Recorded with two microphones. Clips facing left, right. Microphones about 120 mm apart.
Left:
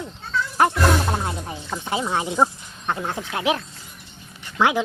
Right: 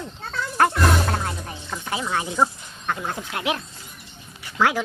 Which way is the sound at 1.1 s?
20° left (ahead or behind).